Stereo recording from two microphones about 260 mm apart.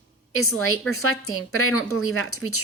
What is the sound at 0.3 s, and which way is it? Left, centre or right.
A woman's voice, left.